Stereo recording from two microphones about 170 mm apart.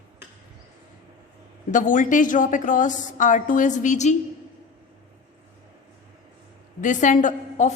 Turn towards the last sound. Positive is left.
turn(degrees=45)  # may be behind; listen again after turning